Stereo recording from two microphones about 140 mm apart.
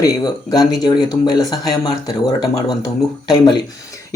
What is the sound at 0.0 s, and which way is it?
Speech, 25° left (ahead or behind).